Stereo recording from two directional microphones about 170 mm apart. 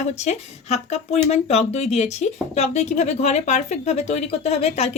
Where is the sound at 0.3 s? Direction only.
40° left (ahead or behind).